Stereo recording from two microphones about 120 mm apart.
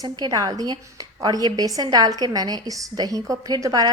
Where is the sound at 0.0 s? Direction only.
30° right (ahead or behind).